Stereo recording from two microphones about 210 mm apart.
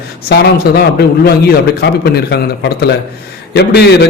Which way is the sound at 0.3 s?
50° left (ahead or behind).